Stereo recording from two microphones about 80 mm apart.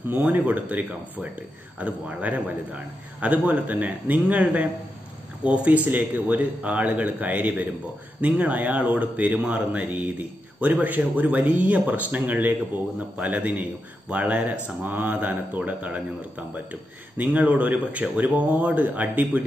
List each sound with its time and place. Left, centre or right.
0.1 s speech: right
17.2 s speech: centre